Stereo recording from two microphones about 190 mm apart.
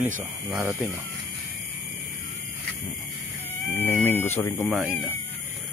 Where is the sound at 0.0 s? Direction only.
5° right (ahead or behind).